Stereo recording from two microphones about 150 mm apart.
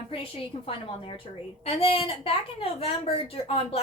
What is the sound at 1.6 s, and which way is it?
A woman's voice, 40° left (ahead or behind).